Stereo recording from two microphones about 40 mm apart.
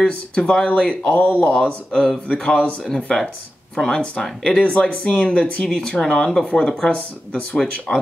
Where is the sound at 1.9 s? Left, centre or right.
Centre.